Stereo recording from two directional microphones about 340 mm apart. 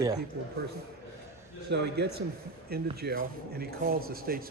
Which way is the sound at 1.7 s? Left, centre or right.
Right.